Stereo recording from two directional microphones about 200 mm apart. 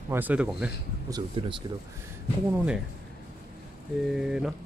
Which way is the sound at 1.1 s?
25° right (ahead or behind).